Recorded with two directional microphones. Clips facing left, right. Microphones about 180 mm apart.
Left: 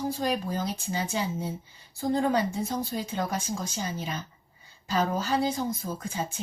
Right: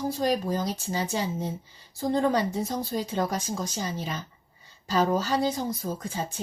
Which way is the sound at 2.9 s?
35° right (ahead or behind).